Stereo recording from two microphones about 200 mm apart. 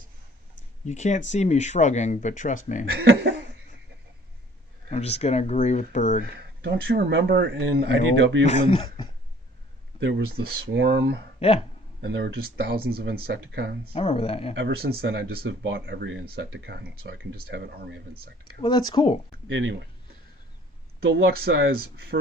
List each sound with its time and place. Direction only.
0.9 s speech: 35° left (ahead or behind)
2.9 s speech: 50° right (ahead or behind)
4.9 s speech: 30° left (ahead or behind)
6.6 s speech: 60° right (ahead or behind)
8.4 s speech: 25° left (ahead or behind)
10.0 s speech: 65° right (ahead or behind)
11.3 s speech: 30° left (ahead or behind)
12.0 s speech: 60° right (ahead or behind)
13.9 s speech: 30° left (ahead or behind)
14.5 s speech: 55° right (ahead or behind)
18.6 s speech: 20° left (ahead or behind)
19.5 s speech: 70° right (ahead or behind)
21.1 s speech: 60° right (ahead or behind)